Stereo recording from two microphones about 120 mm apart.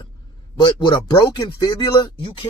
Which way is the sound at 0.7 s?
35° left (ahead or behind).